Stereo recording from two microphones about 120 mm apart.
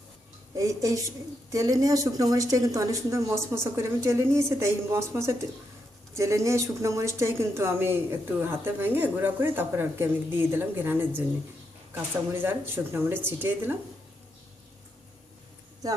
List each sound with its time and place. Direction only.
0.5 s speech: 25° right (ahead or behind)
12.3 s speech: 20° right (ahead or behind)